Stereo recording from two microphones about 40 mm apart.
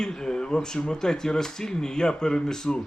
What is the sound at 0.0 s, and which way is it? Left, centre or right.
A man's voice, centre.